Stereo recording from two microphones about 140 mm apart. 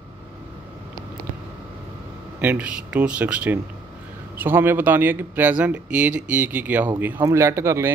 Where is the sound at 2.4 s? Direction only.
10° right (ahead or behind).